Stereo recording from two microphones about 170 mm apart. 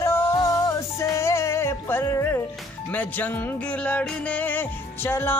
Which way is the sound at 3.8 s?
10° left (ahead or behind).